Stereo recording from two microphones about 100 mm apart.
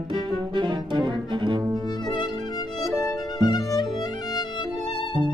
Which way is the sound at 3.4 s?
45° left (ahead or behind).